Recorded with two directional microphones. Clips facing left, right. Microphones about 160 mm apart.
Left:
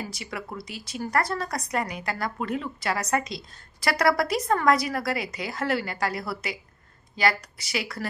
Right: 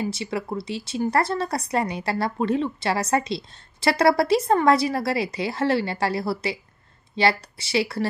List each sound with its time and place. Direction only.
0.0 s speech: 25° right (ahead or behind)